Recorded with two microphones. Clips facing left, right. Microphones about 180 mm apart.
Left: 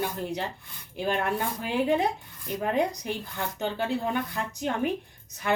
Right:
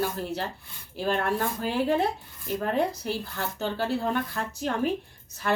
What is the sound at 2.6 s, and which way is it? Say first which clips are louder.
Speech: left 1 dB; 15° left (ahead or behind).